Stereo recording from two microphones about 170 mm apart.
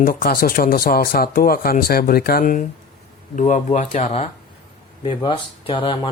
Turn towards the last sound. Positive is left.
turn(degrees=30)  # may be behind; listen again after turning